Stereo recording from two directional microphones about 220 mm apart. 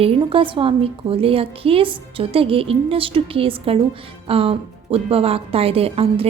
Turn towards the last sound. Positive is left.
turn(degrees=-25)  # may be behind; listen again after turning